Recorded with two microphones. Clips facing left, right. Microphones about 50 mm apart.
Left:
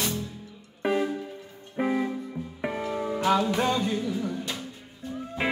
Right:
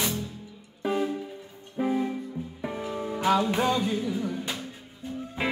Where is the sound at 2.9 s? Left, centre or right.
Left.